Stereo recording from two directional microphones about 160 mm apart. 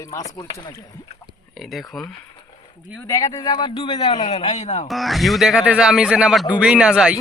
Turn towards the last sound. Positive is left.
turn(degrees=-5)  # may be behind; listen again after turning